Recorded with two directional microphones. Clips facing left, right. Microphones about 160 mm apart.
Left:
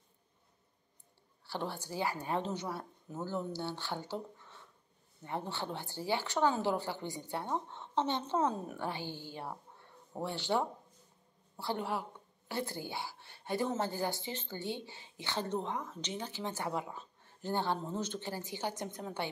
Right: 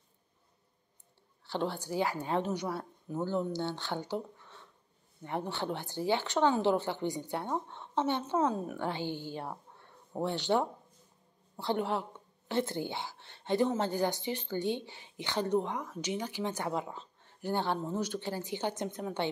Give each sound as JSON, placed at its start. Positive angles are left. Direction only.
{"t": 1.8, "sound": "a woman's voice", "side_deg": -15}
{"t": 5.2, "sound": "a woman's voice", "side_deg": -15}
{"t": 8.4, "sound": "a woman's voice", "side_deg": 10}
{"t": 8.8, "sound": "a woman's voice", "side_deg": -20}